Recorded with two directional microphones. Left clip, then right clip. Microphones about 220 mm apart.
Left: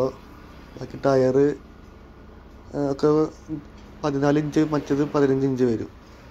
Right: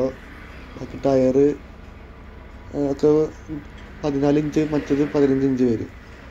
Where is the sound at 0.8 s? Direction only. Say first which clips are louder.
Right 1 dB; 20° left (ahead or behind).